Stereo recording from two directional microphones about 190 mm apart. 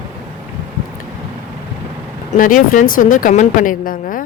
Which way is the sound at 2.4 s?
45° left (ahead or behind).